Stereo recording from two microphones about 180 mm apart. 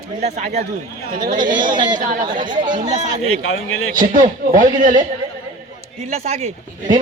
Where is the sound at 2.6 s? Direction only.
25° right (ahead or behind).